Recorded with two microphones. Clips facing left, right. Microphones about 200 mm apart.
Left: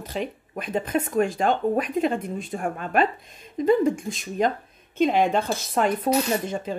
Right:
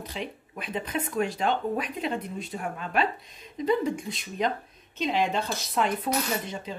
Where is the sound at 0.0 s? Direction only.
45° left (ahead or behind).